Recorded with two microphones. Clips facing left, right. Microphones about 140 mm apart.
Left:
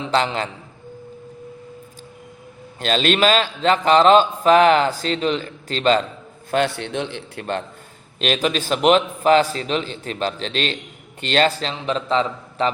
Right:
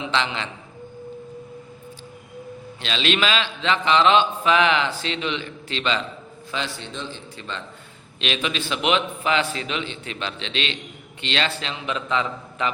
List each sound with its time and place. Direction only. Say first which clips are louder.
0.0 s a man's voice: left 5 dB; 40° left (ahead or behind)
2.8 s a man's voice: left 6 dB; 45° left (ahead or behind)
6.5 s a man's voice: left 10 dB; 60° left (ahead or behind)
8.2 s a man's voice: left 6 dB; 45° left (ahead or behind)